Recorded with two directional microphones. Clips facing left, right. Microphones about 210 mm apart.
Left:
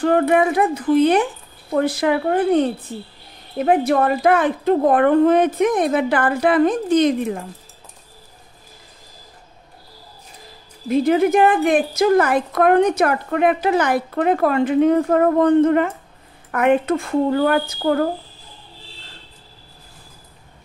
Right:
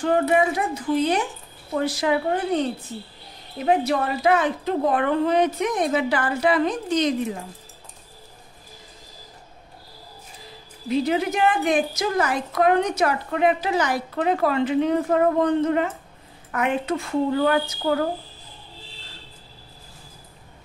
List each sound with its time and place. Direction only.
0.0 s a woman's voice: 60° left (ahead or behind)
10.9 s a woman's voice: 50° left (ahead or behind)